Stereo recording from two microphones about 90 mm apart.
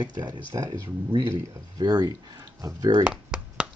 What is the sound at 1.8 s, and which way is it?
Speech, 45° right (ahead or behind).